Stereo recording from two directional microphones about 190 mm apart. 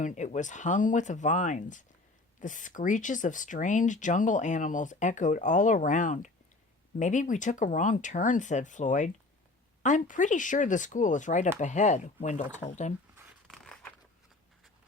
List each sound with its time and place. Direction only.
0.0 s speech: 40° left (ahead or behind)